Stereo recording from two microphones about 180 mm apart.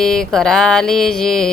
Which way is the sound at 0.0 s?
5° left (ahead or behind).